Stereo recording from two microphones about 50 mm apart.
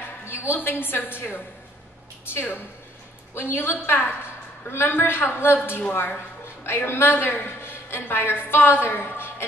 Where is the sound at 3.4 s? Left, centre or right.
Left.